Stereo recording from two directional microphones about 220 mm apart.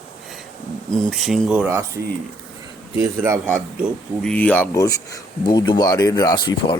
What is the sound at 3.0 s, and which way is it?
Speech, 10° right (ahead or behind).